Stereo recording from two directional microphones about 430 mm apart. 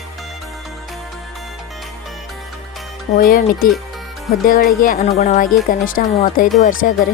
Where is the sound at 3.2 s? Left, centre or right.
Centre.